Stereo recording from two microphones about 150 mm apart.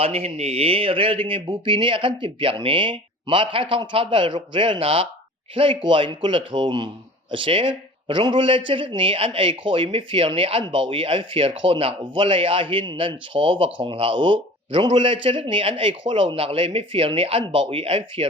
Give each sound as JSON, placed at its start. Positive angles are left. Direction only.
{"t": 0.0, "sound": "a man's voice", "side_deg": -40}